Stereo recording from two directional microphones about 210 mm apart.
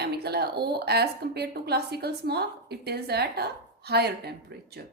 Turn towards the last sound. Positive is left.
turn(degrees=-50)  # may be behind; listen again after turning